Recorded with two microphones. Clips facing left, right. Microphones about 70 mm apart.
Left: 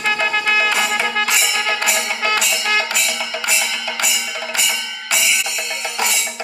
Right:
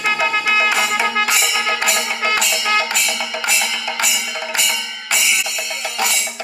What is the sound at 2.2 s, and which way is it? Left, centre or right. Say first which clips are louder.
Music: right 1 dB; centre.